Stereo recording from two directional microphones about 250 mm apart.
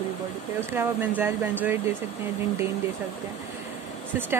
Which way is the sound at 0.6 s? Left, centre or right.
Centre.